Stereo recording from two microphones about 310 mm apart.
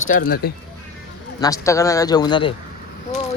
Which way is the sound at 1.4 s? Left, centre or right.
Centre.